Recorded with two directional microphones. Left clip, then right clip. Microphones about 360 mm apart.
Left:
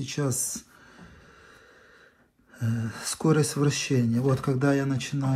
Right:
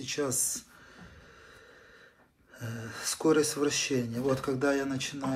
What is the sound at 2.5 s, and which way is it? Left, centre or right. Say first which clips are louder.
Speech: left 5 dB; centre.